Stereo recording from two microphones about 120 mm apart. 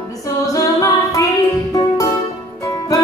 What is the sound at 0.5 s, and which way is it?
A capella, 30° left (ahead or behind).